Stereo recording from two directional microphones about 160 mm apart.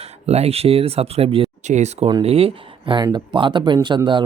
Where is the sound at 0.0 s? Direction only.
40° right (ahead or behind).